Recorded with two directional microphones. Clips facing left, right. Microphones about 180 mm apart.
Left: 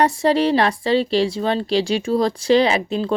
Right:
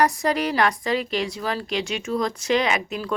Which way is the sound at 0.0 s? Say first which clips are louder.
Left 5 dB; 30° left (ahead or behind).